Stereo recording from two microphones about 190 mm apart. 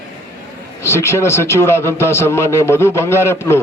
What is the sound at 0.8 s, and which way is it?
A man's voice, 15° left (ahead or behind).